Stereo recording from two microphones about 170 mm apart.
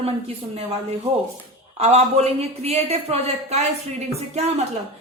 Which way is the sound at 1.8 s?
40° right (ahead or behind).